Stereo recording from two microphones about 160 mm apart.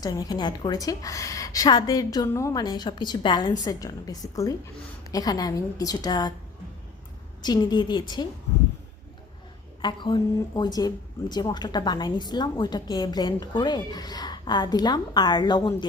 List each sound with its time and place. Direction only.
0.0 s a woman's voice: 25° left (ahead or behind)
7.4 s a woman's voice: 25° left (ahead or behind)
9.8 s a woman's voice: 30° left (ahead or behind)